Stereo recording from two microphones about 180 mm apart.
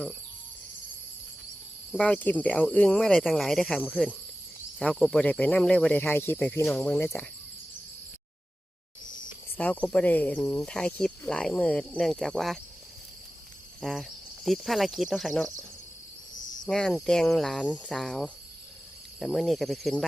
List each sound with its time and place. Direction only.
2.0 s speech: 10° left (ahead or behind)
9.6 s speech: 5° left (ahead or behind)
10.7 s speech: 5° left (ahead or behind)
13.8 s speech: centre (ahead or behind)
16.6 s speech: 5° left (ahead or behind)